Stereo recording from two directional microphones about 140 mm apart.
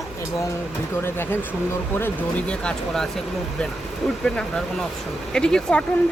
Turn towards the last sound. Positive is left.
turn(degrees=5)  # may be behind; listen again after turning